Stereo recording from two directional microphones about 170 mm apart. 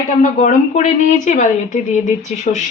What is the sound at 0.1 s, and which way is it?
A woman's voice, 45° left (ahead or behind).